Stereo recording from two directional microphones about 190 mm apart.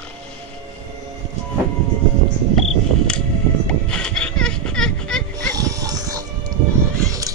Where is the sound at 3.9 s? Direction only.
5° left (ahead or behind).